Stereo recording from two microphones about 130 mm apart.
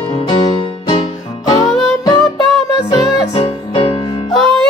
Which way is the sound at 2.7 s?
35° left (ahead or behind).